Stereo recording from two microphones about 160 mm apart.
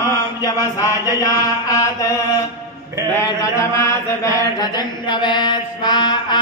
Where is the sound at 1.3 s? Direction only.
20° left (ahead or behind).